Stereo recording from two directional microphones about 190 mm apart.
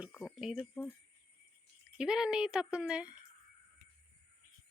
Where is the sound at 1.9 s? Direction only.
5° right (ahead or behind).